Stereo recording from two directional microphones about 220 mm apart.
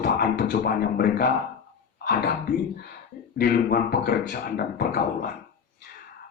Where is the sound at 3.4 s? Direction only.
45° left (ahead or behind).